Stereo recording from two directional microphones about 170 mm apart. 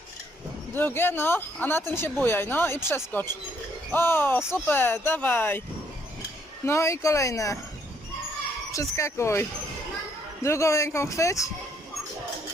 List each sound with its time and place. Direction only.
0.7 s speech: 10° left (ahead or behind)
6.7 s speech: 15° left (ahead or behind)
8.7 s speech: 20° left (ahead or behind)